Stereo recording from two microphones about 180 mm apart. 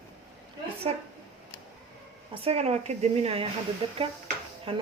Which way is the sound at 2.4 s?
35° right (ahead or behind).